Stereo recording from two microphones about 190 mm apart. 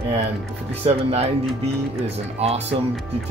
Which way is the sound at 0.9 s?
35° right (ahead or behind).